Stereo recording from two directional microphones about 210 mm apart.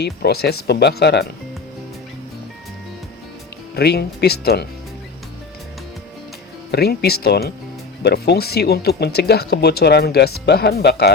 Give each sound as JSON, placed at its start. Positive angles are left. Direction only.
{"t": 0.0, "sound": "speech", "side_deg": 50}
{"t": 3.8, "sound": "speech", "side_deg": 50}
{"t": 6.7, "sound": "speech", "side_deg": 50}